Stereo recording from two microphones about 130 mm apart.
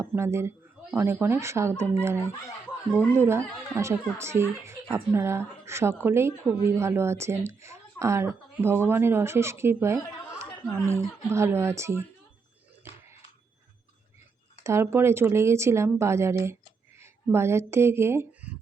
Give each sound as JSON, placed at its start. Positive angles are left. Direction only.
{"t": 0.0, "sound": "speech", "side_deg": -20}
{"t": 14.6, "sound": "speech", "side_deg": -20}